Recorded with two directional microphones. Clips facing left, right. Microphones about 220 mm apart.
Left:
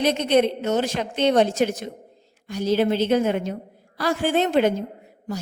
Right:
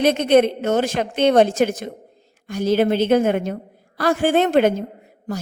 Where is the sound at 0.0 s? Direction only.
50° right (ahead or behind).